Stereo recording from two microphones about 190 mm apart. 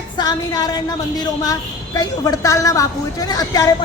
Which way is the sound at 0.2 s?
20° left (ahead or behind).